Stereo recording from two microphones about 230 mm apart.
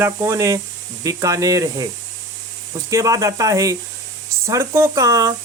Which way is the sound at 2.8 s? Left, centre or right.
Centre.